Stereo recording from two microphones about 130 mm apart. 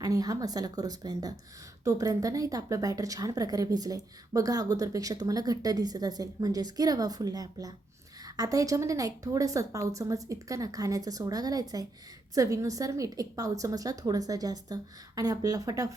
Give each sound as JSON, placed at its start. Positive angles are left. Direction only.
{"t": 0.0, "sound": "a woman's voice", "side_deg": -30}